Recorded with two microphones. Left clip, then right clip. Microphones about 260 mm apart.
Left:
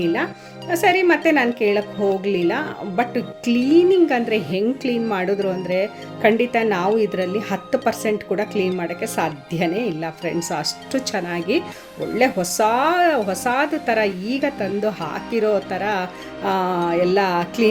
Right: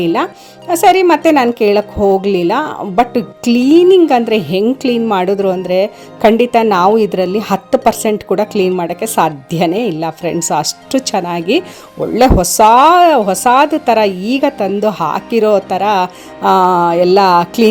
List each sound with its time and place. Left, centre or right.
0.0 s a woman's voice: right